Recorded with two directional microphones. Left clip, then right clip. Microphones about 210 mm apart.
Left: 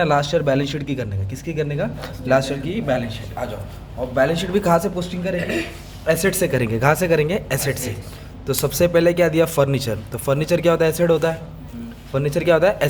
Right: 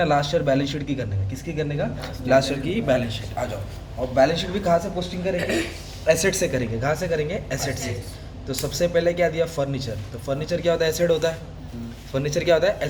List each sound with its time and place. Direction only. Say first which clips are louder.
0.0 s speech: left 3 dB; 30° left (ahead or behind)
2.6 s speech: even; 10° left (ahead or behind)
4.1 s speech: left 1 dB; 30° left (ahead or behind)
6.1 s speech: left 1 dB; 25° left (ahead or behind)